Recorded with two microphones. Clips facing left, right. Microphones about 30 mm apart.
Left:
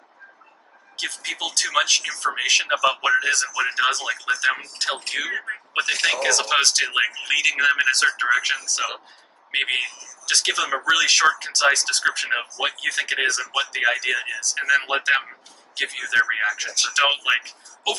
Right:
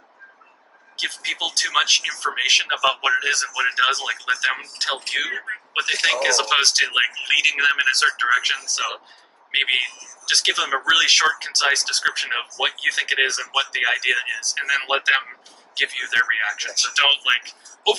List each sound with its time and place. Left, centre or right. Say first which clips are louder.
0.9 s speech: right 3 dB; right
5.7 s speech: right 1 dB; centre
10.5 s speech: right 2 dB; centre; by 14.9 s right
14.9 s speech: right 1 dB; centre